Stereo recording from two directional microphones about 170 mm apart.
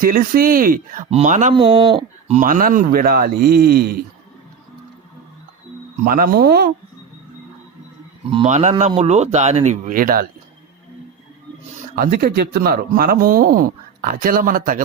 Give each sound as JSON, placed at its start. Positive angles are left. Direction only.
{"t": 0.0, "sound": "speech", "side_deg": -55}
{"t": 1.1, "sound": "speech", "side_deg": -45}
{"t": 1.5, "sound": "speech", "side_deg": -30}
{"t": 2.3, "sound": "speech", "side_deg": -50}
{"t": 6.1, "sound": "speech", "side_deg": -55}
{"t": 8.4, "sound": "speech", "side_deg": -45}
{"t": 11.9, "sound": "speech", "side_deg": -60}